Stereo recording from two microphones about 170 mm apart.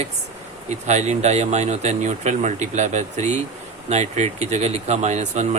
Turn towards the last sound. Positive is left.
turn(degrees=-40)  # may be behind; listen again after turning